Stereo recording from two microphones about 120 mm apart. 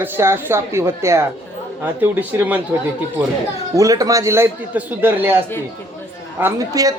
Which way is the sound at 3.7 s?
30° right (ahead or behind).